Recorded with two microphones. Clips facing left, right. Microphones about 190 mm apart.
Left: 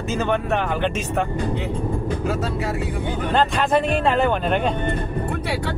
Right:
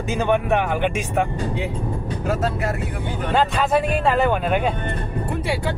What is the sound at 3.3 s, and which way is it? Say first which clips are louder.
Speech: even; 5° right (ahead or behind).